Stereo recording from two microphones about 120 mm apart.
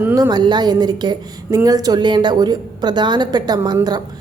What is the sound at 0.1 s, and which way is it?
A woman's voice, 35° right (ahead or behind).